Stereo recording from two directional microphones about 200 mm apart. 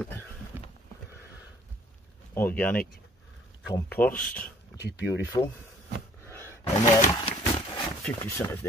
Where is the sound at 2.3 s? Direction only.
10° left (ahead or behind).